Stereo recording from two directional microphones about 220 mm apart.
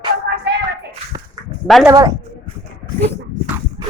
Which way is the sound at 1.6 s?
Centre (ahead or behind).